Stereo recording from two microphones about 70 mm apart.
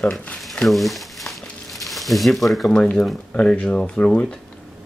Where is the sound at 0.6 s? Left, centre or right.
Centre.